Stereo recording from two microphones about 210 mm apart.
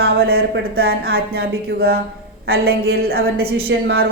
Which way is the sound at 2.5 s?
45° right (ahead or behind).